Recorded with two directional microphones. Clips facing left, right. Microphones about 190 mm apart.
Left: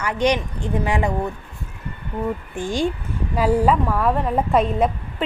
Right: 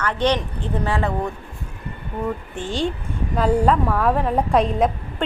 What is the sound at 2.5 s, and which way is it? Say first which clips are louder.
Speech: left 2 dB; 10° left (ahead or behind).